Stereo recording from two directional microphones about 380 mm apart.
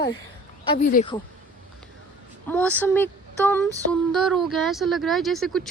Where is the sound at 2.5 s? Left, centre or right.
Centre.